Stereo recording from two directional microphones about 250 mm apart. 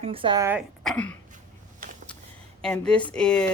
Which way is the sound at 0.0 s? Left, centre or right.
Right.